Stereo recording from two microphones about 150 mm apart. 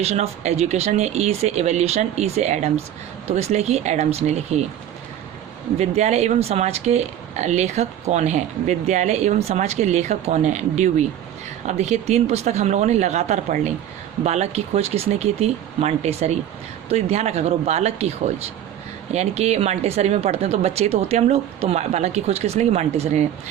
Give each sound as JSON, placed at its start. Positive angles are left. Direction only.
{"t": 0.0, "sound": "speech", "side_deg": -45}
{"t": 5.8, "sound": "speech", "side_deg": -45}
{"t": 19.1, "sound": "speech", "side_deg": -45}